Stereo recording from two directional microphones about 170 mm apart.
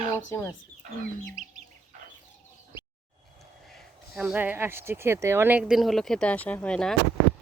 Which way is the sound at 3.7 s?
5° right (ahead or behind).